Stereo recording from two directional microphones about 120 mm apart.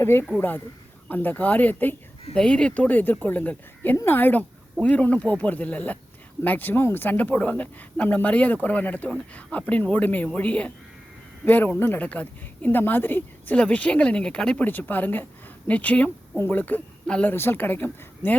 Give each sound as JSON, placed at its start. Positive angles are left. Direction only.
{"t": 0.0, "sound": "speech", "side_deg": 20}